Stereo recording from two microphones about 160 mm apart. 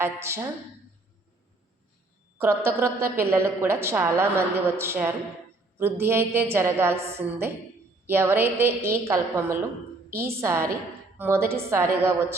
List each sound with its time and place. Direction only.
0.0 s a woman's voice: 15° right (ahead or behind)
2.6 s a woman's voice: 15° right (ahead or behind)